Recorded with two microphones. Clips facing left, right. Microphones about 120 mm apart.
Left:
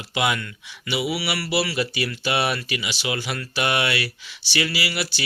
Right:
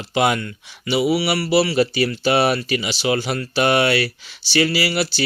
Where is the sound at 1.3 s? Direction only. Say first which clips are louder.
Right 7 dB; 25° right (ahead or behind).